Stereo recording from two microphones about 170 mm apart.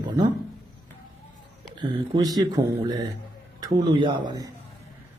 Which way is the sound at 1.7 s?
25° right (ahead or behind).